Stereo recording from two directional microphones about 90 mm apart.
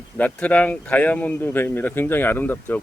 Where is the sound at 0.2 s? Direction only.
15° left (ahead or behind).